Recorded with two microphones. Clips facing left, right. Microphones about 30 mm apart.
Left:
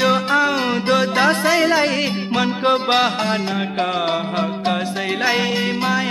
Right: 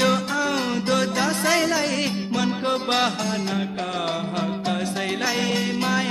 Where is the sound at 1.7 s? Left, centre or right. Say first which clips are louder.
Left 6 dB; left.